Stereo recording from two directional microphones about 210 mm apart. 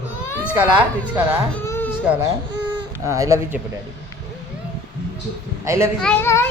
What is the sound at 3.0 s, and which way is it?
Speech, 15° right (ahead or behind).